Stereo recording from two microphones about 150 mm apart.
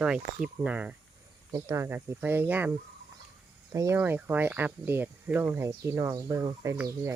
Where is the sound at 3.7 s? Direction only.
20° right (ahead or behind).